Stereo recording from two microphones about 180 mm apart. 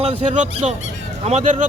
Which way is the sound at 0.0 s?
35° right (ahead or behind).